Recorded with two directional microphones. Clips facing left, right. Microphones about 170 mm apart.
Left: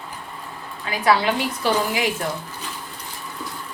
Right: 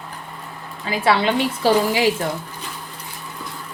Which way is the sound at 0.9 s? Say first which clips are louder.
Right 1 dB; 25° right (ahead or behind).